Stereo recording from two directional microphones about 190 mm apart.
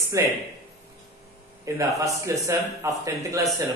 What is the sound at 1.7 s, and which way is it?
Speech, 15° right (ahead or behind).